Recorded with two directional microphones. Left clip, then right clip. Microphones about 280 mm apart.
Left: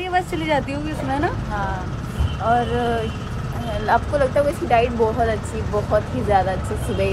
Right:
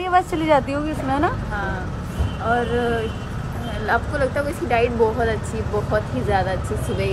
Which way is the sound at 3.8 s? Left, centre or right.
Centre.